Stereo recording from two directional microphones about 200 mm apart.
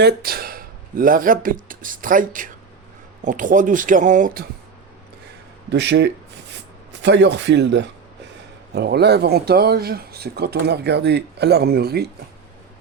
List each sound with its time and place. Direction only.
0.0 s speech: 50° right (ahead or behind)
5.7 s speech: 60° right (ahead or behind)